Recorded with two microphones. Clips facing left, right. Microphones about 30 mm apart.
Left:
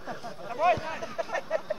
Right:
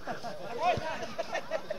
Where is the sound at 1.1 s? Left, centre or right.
Right.